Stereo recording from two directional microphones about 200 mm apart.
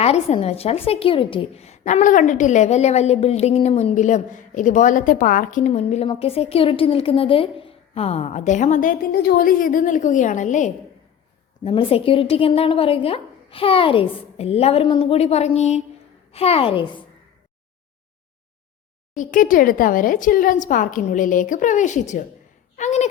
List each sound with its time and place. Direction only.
0.0 s a woman's voice: 30° left (ahead or behind)
11.6 s a woman's voice: 25° left (ahead or behind)
19.1 s a woman's voice: 40° left (ahead or behind)